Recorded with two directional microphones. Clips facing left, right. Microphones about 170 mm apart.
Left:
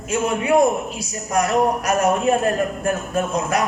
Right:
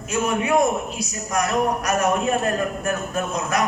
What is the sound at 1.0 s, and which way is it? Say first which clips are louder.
A man's voice: left 3 dB; 30° left (ahead or behind).